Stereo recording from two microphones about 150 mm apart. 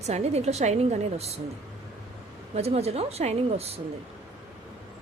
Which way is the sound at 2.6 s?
45° right (ahead or behind).